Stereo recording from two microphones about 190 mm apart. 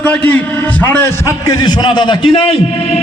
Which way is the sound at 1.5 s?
20° left (ahead or behind).